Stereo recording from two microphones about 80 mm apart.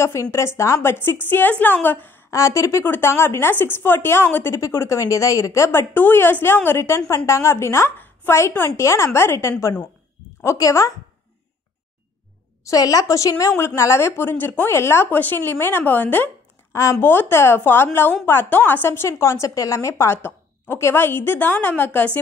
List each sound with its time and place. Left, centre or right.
0.0 s a woman's voice: left
1.3 s a woman's voice: left
2.3 s a woman's voice: left
2.8 s a woman's voice: left
8.0 s a sound: left
8.4 s a woman's voice: left
12.6 s a woman's voice: left
16.7 s a woman's voice: left